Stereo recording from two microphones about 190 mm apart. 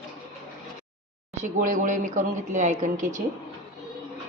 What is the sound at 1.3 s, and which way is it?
Speech, 40° right (ahead or behind).